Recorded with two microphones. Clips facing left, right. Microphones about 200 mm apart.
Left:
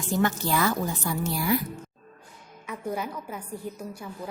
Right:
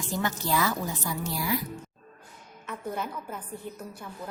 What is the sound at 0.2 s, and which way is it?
Speech, 50° left (ahead or behind).